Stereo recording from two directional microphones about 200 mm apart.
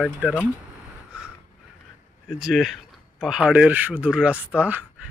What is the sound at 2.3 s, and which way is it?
Speech, centre (ahead or behind).